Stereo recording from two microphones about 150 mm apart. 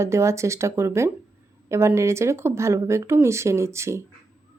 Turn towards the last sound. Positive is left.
turn(degrees=-20)  # may be behind; listen again after turning